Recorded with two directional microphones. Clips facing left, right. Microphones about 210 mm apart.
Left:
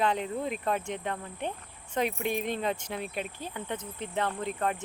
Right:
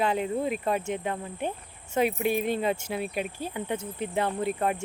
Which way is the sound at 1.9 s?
5° right (ahead or behind).